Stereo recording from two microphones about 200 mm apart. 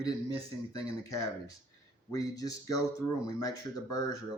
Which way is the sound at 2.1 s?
15° left (ahead or behind).